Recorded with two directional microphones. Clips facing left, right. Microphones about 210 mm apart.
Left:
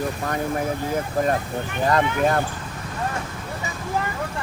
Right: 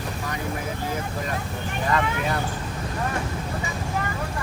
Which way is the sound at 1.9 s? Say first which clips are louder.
Left 5 dB; 50° left (ahead or behind).